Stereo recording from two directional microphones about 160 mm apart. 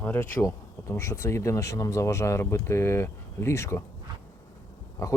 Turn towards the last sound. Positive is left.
turn(degrees=20)  # may be behind; listen again after turning